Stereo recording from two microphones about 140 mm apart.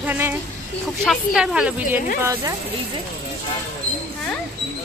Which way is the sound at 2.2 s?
20° right (ahead or behind).